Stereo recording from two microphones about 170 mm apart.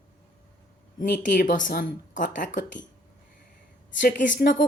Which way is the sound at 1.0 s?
50° left (ahead or behind).